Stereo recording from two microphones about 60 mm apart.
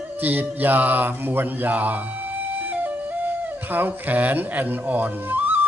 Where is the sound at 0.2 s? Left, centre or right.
Right.